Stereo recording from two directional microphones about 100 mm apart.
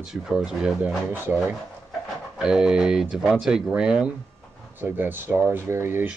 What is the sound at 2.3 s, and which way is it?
Speech, 5° right (ahead or behind).